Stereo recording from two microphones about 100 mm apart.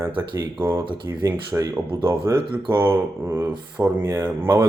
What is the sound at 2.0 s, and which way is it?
Speech, 55° right (ahead or behind).